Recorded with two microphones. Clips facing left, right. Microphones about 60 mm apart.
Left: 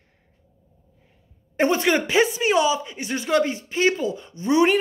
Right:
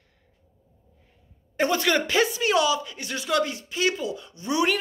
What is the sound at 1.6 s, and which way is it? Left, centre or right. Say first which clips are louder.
Speech: left 3 dB; left.